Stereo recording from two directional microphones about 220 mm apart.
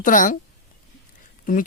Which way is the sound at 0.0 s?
35° left (ahead or behind).